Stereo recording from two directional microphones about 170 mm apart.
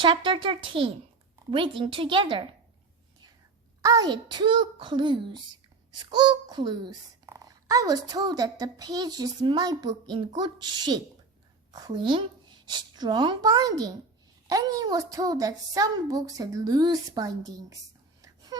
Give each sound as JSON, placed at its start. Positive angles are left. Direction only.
{"t": 0.0, "sound": "a child's voice", "side_deg": -30}
{"t": 3.8, "sound": "a child's voice", "side_deg": -20}